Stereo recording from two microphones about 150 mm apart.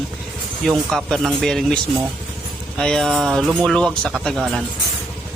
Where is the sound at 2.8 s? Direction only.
5° left (ahead or behind).